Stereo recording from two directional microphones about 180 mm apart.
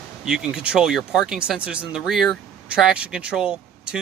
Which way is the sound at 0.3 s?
5° right (ahead or behind).